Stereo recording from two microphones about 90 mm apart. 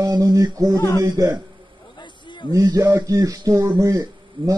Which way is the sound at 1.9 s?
60° left (ahead or behind).